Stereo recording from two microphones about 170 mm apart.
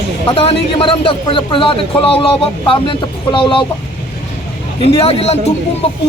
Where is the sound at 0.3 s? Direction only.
35° left (ahead or behind).